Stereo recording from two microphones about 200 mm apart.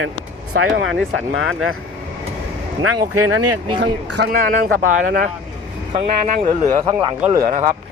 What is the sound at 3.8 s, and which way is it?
Speech, 55° right (ahead or behind).